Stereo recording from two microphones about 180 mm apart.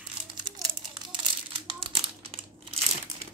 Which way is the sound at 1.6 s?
30° right (ahead or behind).